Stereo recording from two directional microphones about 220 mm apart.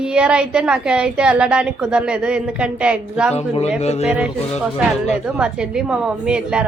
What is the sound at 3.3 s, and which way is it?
Speech, 30° left (ahead or behind).